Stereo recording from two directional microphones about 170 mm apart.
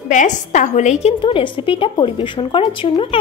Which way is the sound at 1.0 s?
30° left (ahead or behind).